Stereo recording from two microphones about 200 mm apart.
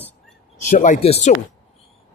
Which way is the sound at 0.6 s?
40° left (ahead or behind).